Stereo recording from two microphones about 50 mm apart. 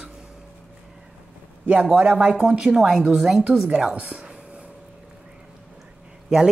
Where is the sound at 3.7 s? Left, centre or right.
Right.